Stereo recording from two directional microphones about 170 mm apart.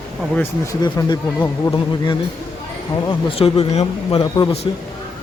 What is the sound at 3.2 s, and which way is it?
Speech, 30° left (ahead or behind).